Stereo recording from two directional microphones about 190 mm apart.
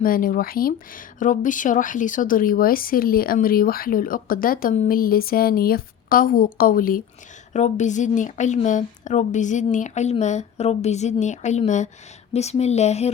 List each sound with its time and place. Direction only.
0.0 s a woman's voice: 45° left (ahead or behind)